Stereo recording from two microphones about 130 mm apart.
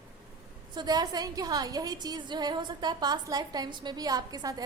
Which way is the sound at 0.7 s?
30° right (ahead or behind).